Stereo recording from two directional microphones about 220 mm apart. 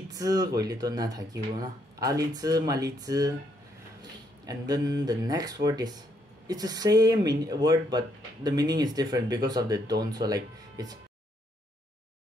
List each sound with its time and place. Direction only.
0.1 s speech: 15° right (ahead or behind)